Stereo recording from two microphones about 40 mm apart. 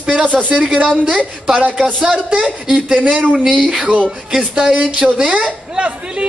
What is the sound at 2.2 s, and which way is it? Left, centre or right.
Mantra, right.